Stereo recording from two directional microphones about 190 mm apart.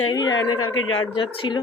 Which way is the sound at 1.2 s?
25° left (ahead or behind).